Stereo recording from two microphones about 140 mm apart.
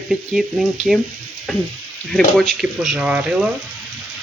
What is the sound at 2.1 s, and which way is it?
Speech, 5° left (ahead or behind).